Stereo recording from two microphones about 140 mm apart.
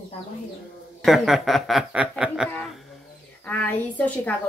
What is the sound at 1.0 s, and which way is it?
Speech, centre (ahead or behind).